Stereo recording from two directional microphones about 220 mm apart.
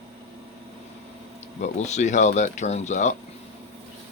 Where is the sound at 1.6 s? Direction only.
30° left (ahead or behind).